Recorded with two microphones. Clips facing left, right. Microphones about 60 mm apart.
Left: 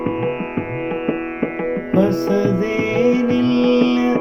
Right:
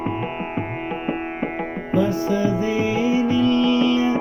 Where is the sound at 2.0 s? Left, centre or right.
Left.